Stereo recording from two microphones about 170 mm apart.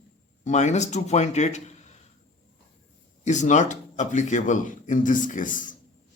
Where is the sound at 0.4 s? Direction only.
40° left (ahead or behind).